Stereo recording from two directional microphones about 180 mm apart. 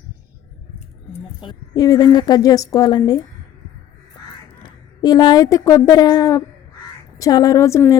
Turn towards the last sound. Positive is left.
turn(degrees=15)  # may be behind; listen again after turning